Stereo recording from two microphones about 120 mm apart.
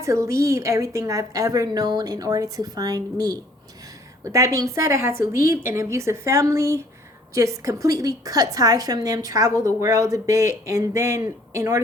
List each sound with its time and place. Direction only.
0.0 s a woman's voice: 25° right (ahead or behind)